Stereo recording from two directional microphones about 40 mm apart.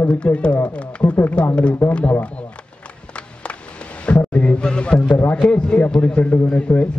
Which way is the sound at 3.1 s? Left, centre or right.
Left.